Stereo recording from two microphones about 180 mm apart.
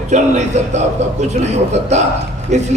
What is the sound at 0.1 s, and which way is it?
Speech, 40° right (ahead or behind).